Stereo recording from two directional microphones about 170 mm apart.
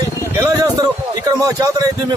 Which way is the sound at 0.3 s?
20° right (ahead or behind).